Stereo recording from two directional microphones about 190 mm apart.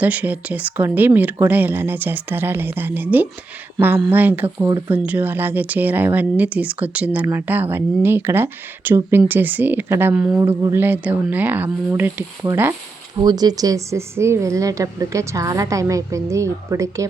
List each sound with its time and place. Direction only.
0.0 s speech: 10° right (ahead or behind)
13.1 s speech: 20° right (ahead or behind)